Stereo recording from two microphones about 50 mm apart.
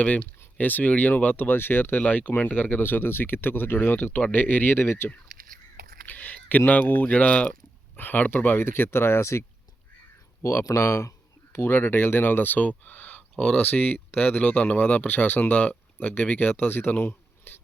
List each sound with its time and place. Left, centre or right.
0.0 s speech: left
6.1 s a sound: left
6.7 s speech: left
7.9 s speech: left
10.4 s speech: left
11.5 s speech: left
16.6 s speech: left
17.1 s a sound: left